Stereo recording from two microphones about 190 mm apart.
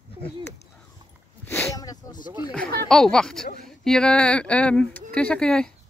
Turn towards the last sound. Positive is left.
turn(degrees=5)  # may be behind; listen again after turning